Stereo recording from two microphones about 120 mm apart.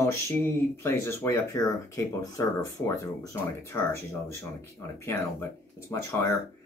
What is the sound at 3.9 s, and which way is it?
Speech, 25° left (ahead or behind).